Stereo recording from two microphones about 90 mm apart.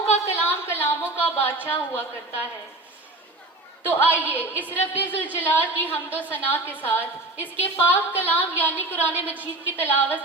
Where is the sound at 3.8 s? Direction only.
25° left (ahead or behind).